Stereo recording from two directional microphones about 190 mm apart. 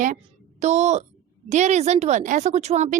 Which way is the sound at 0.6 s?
35° right (ahead or behind).